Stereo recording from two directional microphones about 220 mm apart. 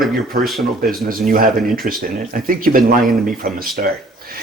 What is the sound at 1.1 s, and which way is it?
Speech, 40° right (ahead or behind).